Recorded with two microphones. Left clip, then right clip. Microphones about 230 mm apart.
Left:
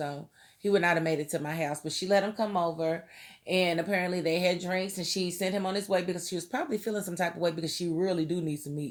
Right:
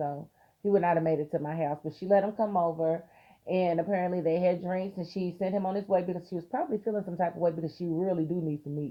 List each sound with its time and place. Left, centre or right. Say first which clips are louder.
0.6 s speech: even; left